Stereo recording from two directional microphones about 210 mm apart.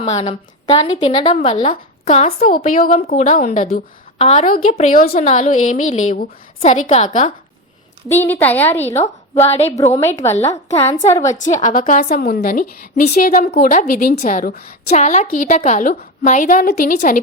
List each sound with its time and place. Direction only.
0.7 s a woman's voice: 20° left (ahead or behind); by 7.3 s 35° left (ahead or behind)
8.0 s a woman's voice: 10° left (ahead or behind)
9.4 s a woman's voice: 30° left (ahead or behind)
10.7 s a woman's voice: 15° left (ahead or behind)
11.4 s a woman's voice: 35° left (ahead or behind)